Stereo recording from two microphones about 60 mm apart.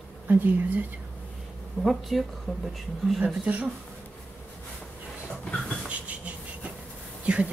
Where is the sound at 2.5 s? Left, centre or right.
Centre.